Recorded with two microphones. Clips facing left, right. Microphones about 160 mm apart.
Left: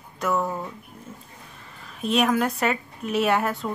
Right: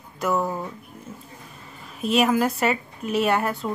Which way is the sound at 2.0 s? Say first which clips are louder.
Right 2 dB; 5° right (ahead or behind).